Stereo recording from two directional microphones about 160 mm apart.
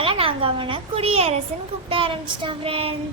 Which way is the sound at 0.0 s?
35° right (ahead or behind).